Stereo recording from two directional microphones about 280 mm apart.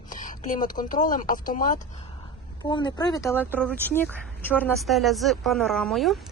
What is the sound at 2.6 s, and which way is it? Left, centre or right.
Speech, centre.